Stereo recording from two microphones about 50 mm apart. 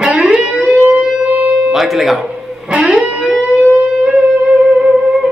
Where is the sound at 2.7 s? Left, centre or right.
Right.